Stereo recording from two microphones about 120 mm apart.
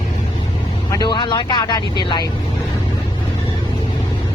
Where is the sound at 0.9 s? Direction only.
35° left (ahead or behind).